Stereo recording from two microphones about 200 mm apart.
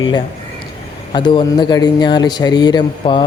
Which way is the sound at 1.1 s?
20° left (ahead or behind).